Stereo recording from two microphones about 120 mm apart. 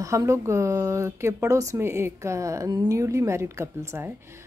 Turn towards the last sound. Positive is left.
turn(degrees=-20)  # may be behind; listen again after turning